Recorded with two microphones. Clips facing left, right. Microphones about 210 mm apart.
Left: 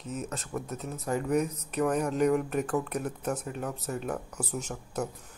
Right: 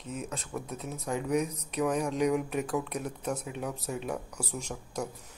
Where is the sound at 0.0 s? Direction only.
Centre (ahead or behind).